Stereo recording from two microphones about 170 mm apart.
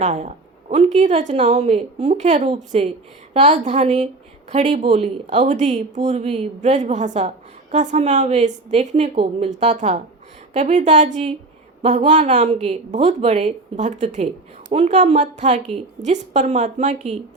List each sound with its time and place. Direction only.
0.0 s speech: 45° right (ahead or behind)